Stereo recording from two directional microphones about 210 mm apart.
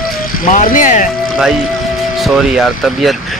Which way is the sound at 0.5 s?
40° left (ahead or behind).